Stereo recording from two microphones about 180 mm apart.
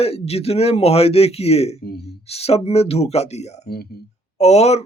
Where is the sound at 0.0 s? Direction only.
35° left (ahead or behind).